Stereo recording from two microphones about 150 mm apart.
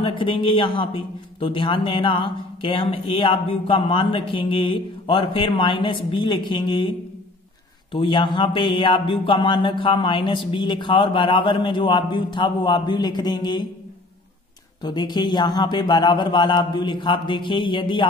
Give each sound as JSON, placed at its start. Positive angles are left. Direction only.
{"t": 0.0, "sound": "a man's voice", "side_deg": 35}
{"t": 7.9, "sound": "a man's voice", "side_deg": 35}
{"t": 14.8, "sound": "a man's voice", "side_deg": 30}